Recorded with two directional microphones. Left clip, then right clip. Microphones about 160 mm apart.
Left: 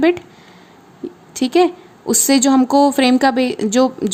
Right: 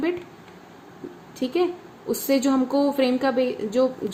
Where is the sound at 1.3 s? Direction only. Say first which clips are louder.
Left 9 dB; 75° left (ahead or behind).